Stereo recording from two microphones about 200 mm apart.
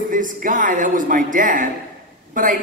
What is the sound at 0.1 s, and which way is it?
A man's voice, 40° right (ahead or behind).